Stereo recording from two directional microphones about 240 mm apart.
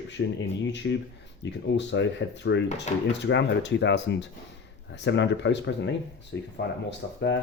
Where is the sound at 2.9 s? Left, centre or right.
Left.